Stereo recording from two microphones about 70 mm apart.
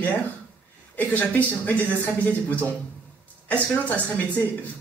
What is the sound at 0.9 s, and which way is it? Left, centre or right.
Speech, left.